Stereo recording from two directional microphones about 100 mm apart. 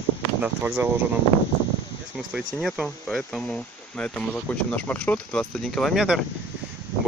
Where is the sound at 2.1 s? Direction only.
Centre (ahead or behind).